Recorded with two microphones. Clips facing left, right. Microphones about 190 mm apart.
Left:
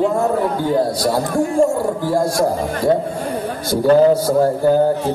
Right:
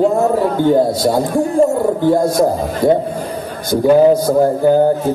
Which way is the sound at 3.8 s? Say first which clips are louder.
Right 2 dB; 10° right (ahead or behind).